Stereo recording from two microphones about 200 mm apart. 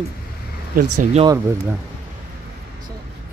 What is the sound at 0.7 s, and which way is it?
Speech, 40° right (ahead or behind).